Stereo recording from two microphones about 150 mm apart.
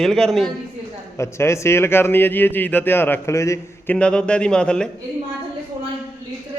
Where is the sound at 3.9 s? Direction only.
5° left (ahead or behind).